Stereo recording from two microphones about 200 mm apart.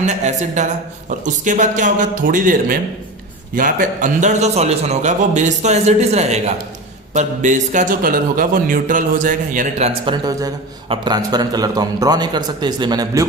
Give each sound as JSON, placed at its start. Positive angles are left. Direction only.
{"t": 0.0, "sound": "a man's voice", "side_deg": -35}